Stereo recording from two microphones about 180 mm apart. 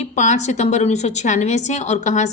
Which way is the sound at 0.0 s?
40° left (ahead or behind).